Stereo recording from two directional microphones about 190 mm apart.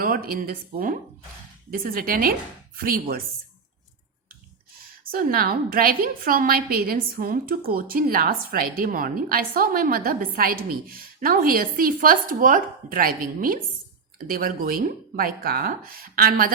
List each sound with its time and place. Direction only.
0.0 s a woman's voice: 50° right (ahead or behind)
5.1 s a woman's voice: 50° right (ahead or behind)